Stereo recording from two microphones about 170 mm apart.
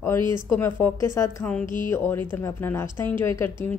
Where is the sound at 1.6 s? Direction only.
50° left (ahead or behind).